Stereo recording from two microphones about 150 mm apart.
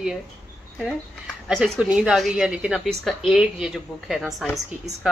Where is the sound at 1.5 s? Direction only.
5° right (ahead or behind).